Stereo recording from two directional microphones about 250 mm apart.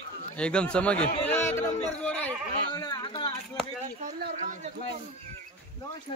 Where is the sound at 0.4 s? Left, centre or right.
Centre.